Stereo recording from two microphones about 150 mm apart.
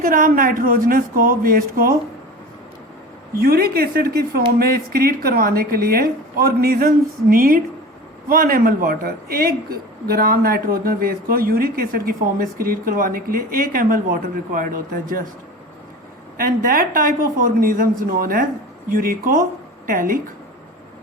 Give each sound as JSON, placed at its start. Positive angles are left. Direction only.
{"t": 0.0, "sound": "speech", "side_deg": -70}
{"t": 3.4, "sound": "a woman's voice", "side_deg": -90}
{"t": 16.4, "sound": "speech", "side_deg": -70}